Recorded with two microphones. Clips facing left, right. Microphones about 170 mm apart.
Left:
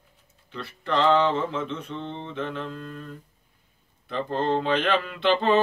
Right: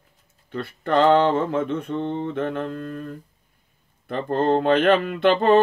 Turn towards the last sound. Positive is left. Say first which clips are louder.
# right 5 dB
turn(degrees=-50)  # may be behind; listen again after turning